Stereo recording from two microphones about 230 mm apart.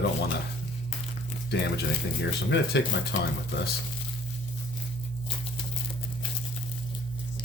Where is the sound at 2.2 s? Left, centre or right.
Left.